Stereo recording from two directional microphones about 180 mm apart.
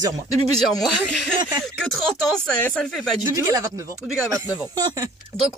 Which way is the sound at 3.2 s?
20° right (ahead or behind).